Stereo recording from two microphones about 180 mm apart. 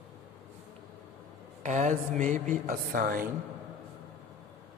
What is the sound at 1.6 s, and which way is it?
Speech, 45° right (ahead or behind).